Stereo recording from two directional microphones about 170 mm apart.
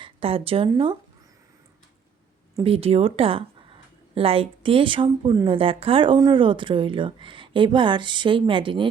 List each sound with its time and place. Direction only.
0.0 s speech: 35° right (ahead or behind)
2.6 s speech: 35° right (ahead or behind)